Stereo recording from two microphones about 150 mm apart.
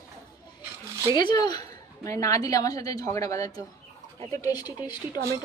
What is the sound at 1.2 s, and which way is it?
A woman's voice, 30° left (ahead or behind).